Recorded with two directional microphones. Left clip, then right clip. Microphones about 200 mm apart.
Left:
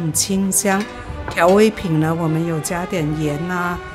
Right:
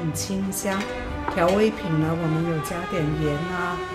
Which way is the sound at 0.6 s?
35° left (ahead or behind).